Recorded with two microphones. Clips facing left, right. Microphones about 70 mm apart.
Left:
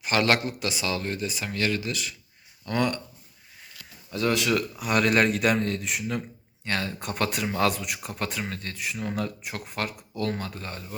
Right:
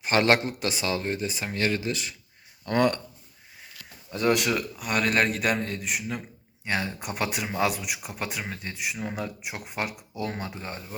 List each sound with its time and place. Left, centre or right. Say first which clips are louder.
0.0 s speech: right 2 dB; right
4.1 s speech: even; centre
4.8 s a man's voice: left 2 dB; centre; by 10.8 s right